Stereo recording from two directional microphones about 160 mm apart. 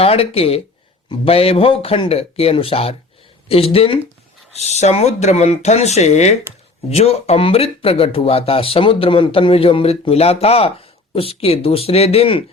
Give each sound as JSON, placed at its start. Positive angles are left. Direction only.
{"t": 0.0, "sound": "speech", "side_deg": 40}